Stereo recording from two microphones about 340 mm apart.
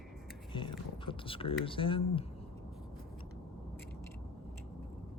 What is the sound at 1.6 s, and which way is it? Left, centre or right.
Speech, centre.